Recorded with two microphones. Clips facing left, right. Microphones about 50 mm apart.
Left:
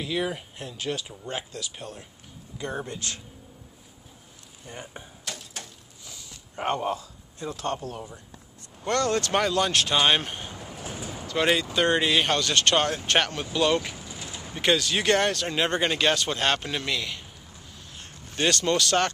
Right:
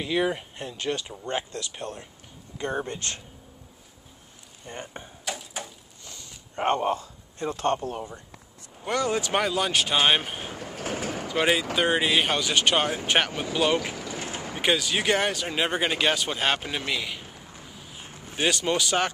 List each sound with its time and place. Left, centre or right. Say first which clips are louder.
0.0 s speech: right 3 dB; centre
2.5 s speech: right 3 dB; centre
4.6 s speech: right 2 dB; centre
5.2 s typewriter: right 5 dB; centre
6.5 s a man's voice: right 3 dB; centre
7.3 s speech: right 5 dB; right
8.8 s speech: left 1 dB; centre
10.6 s vehicle: right 5 dB; right
11.2 s speech: even; centre
14.0 s a sound: right 6 dB; right
14.6 s speech: left 1 dB; centre
17.6 s vehicle: right 2 dB; centre